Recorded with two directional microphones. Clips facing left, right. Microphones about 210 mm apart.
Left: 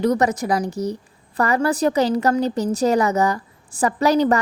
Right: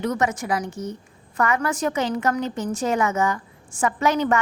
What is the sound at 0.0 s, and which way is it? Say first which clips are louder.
A woman's voice: left 5 dB; 35° left (ahead or behind).